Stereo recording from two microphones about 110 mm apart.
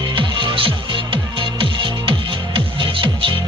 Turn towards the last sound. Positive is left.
turn(degrees=-50)  # may be behind; listen again after turning